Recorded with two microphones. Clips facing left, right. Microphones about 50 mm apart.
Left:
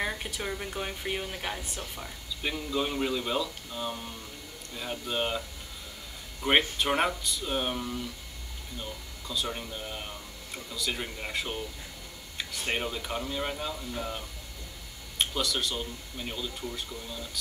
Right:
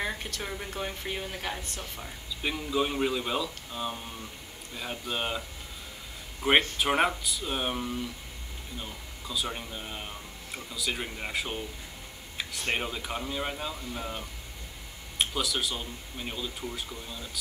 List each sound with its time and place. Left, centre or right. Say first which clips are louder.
0.0 s speech: left 1 dB; centre
6.4 s speech: right 1 dB; centre